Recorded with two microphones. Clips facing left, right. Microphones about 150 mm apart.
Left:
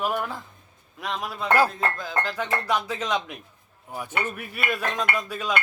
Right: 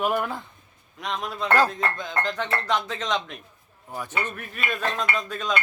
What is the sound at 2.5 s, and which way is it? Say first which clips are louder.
A man's voice: even; 10° left (ahead or behind).